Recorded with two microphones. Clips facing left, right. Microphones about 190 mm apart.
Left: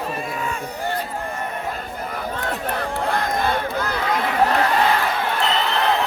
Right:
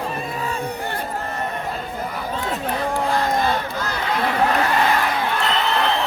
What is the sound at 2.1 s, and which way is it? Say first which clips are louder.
Crowd: left 1 dB; 60° left (ahead or behind).